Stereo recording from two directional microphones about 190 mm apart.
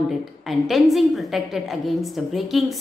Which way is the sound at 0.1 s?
Centre (ahead or behind).